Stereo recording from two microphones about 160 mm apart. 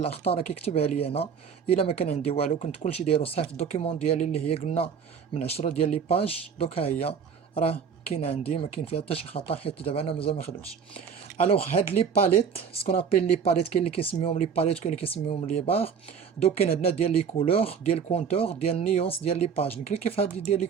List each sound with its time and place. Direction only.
0.0 s speech: 40° left (ahead or behind)